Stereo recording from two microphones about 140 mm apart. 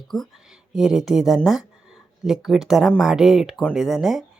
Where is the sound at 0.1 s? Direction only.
Centre (ahead or behind).